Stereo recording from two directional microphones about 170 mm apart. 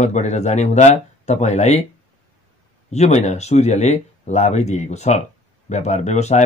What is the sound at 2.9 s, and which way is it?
Speech, 40° left (ahead or behind).